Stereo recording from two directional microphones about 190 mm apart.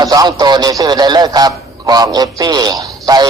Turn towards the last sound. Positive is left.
turn(degrees=-20)  # may be behind; listen again after turning